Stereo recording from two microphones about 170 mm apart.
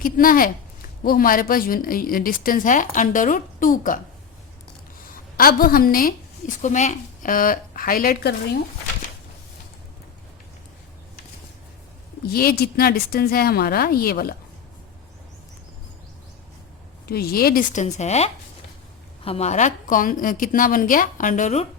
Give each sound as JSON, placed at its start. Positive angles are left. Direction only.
{"t": 0.0, "sound": "speech", "side_deg": 55}
{"t": 5.4, "sound": "speech", "side_deg": 60}
{"t": 6.6, "sound": "speech", "side_deg": 45}
{"t": 12.2, "sound": "speech", "side_deg": 65}
{"t": 17.1, "sound": "a woman's voice", "side_deg": 65}